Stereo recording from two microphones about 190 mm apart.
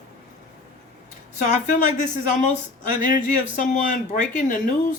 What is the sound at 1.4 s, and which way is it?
Speech, 40° left (ahead or behind).